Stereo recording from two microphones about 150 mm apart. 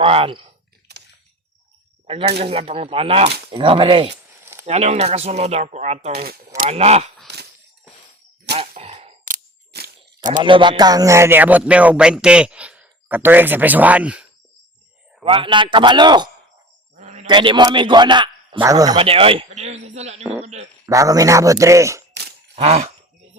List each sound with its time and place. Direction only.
0.0 s speech: 40° right (ahead or behind)
0.9 s a sound: 90° right
2.0 s a man's voice: 40° right (ahead or behind)
6.2 s speech: 90° right
6.7 s speech: 45° right (ahead or behind)
8.8 s a sound: 45° right (ahead or behind)
9.2 s a sound: 75° right (ahead or behind); by 10.4 s 60° right (ahead or behind)
10.4 s speech: 35° right (ahead or behind); by 14.3 s 10° right (ahead or behind)
15.2 s a man's voice: 35° right (ahead or behind)
16.9 s a sound: 50° right (ahead or behind)
17.2 s a man's voice: 30° right (ahead or behind)
18.9 s a man's voice: 40° right (ahead or behind)
20.8 s a man's voice: 20° right (ahead or behind)
22.5 s speech: 45° right (ahead or behind)